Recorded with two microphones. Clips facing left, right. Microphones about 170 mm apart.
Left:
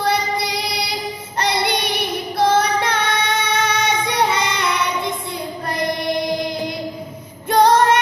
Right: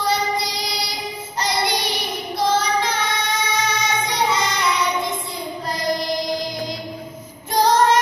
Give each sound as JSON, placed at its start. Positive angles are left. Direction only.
{"t": 0.0, "sound": "child singing", "side_deg": 60}
{"t": 7.5, "sound": "female singing", "side_deg": 60}